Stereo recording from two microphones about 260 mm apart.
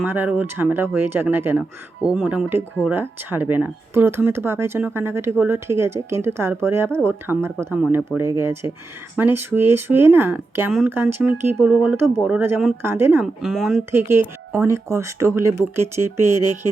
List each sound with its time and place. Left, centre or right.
0.0 s speech: centre